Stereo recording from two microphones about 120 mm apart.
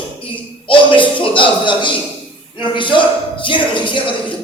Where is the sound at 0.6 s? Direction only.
45° left (ahead or behind).